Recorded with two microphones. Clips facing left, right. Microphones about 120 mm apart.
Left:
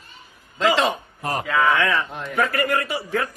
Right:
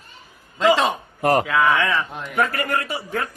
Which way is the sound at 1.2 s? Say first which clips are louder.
Right 9 dB; 70° right (ahead or behind).